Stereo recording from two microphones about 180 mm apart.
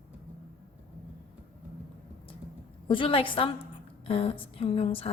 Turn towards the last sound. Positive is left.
turn(degrees=30)  # may be behind; listen again after turning